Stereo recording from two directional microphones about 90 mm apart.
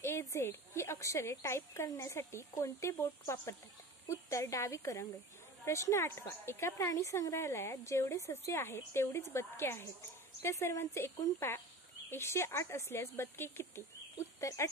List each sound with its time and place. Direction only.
0.0 s speech: 30° left (ahead or behind)